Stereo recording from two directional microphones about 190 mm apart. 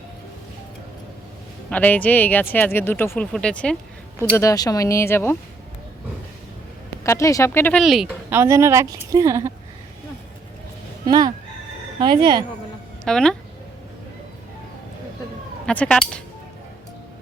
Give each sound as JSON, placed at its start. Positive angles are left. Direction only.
{"t": 1.7, "sound": "speech", "side_deg": 10}
{"t": 7.0, "sound": "speech", "side_deg": 15}
{"t": 7.8, "sound": "speech", "side_deg": 0}
{"t": 11.0, "sound": "speech", "side_deg": -20}
{"t": 13.1, "sound": "speech", "side_deg": 5}
{"t": 15.6, "sound": "cutlery", "side_deg": 5}